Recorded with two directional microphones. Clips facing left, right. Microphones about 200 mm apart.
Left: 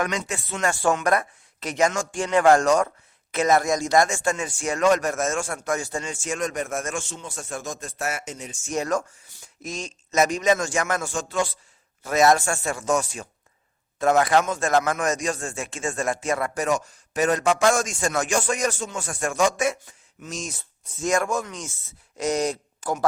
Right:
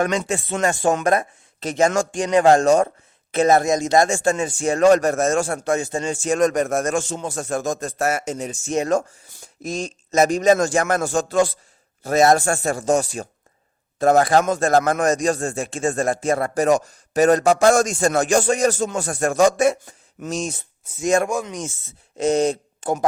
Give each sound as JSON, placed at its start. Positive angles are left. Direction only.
{"t": 0.3, "sound": "speech", "side_deg": -30}
{"t": 8.7, "sound": "speech", "side_deg": -25}
{"t": 20.4, "sound": "speech", "side_deg": -30}
{"t": 21.2, "sound": "speech", "side_deg": -15}